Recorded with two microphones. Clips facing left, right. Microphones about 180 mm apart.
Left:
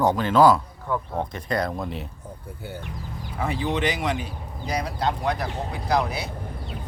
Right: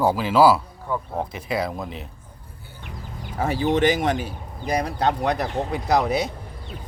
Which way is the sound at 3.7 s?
45° right (ahead or behind).